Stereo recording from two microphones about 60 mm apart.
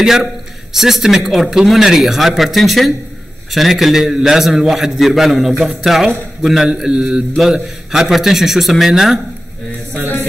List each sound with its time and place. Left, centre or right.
0.0 s a man's voice: centre